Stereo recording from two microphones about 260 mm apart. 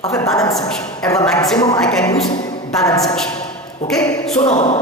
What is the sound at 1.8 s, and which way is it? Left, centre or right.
Speech, centre.